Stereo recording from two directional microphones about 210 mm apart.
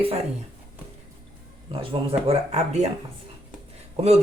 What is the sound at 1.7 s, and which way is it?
Speech, 25° right (ahead or behind).